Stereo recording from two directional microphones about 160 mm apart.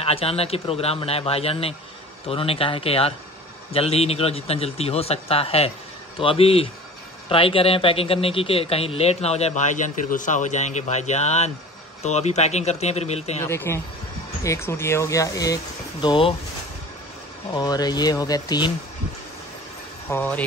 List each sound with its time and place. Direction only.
0.0 s speech: 35° left (ahead or behind)
13.4 s speech: 15° left (ahead or behind); by 16.3 s 30° left (ahead or behind)
17.6 s speech: 25° left (ahead or behind)
20.1 s speech: 10° left (ahead or behind)